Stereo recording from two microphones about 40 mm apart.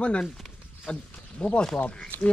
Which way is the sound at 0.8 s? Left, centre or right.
Left.